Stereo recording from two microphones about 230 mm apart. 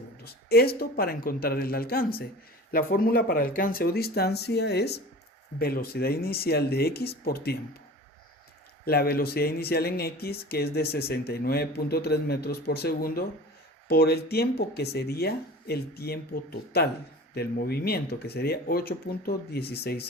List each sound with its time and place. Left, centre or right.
0.3 s speech: left
8.8 s speech: left